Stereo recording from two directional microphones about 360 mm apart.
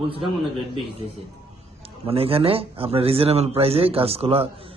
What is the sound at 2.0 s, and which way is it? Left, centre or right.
Speech, centre.